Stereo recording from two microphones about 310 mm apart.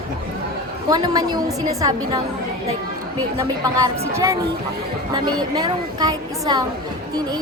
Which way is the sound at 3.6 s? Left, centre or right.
Centre.